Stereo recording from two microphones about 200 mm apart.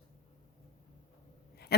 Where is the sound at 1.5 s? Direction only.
55° left (ahead or behind).